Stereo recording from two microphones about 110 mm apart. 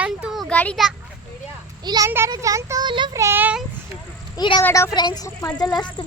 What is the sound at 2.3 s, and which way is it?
Speech, 30° right (ahead or behind).